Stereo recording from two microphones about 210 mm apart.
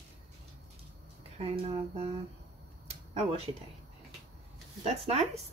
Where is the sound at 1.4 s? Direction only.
30° right (ahead or behind).